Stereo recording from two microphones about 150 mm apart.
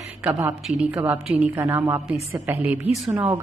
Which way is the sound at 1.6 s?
20° right (ahead or behind).